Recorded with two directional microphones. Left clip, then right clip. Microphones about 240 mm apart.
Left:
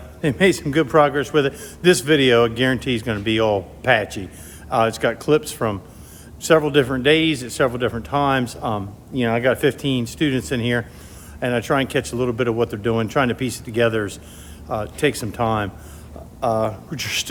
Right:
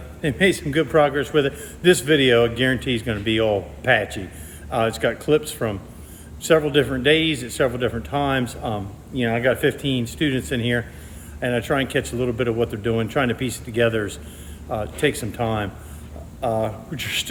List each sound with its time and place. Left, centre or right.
0.2 s speech: centre